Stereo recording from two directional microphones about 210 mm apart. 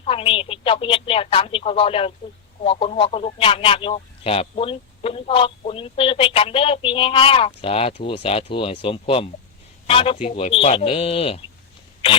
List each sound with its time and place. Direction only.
0.0 s speech: 25° left (ahead or behind)